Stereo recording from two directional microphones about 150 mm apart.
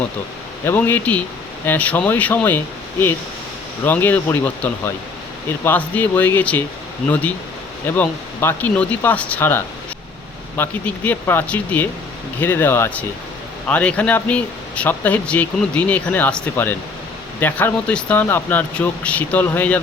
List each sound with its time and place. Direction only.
0.6 s speech: 15° left (ahead or behind)
3.8 s speech: 10° left (ahead or behind)